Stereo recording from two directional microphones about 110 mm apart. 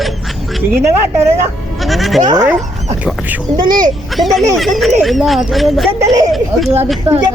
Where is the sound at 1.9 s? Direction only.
Centre (ahead or behind).